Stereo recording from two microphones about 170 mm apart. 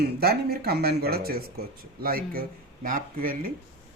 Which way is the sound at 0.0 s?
65° right (ahead or behind).